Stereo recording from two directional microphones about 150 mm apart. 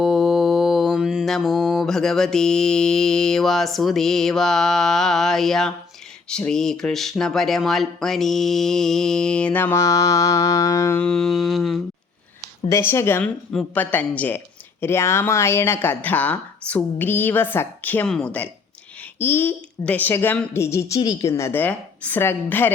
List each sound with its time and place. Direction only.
0.0 s mantra: 5° right (ahead or behind)
6.2 s speech: 5° left (ahead or behind)
11.0 s speech: 5° left (ahead or behind)
12.4 s speech: 20° left (ahead or behind)